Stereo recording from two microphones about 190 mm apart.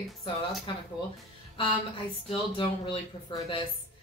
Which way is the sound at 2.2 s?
25° left (ahead or behind).